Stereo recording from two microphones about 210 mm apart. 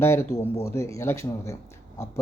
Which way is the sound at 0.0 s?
10° left (ahead or behind).